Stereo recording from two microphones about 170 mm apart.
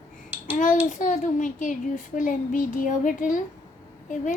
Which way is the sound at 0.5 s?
50° left (ahead or behind).